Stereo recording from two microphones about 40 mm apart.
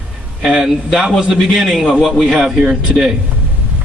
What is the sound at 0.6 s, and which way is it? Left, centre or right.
A man's voice, centre.